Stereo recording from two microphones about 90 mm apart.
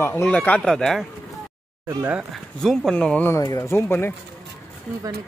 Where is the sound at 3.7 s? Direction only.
25° left (ahead or behind).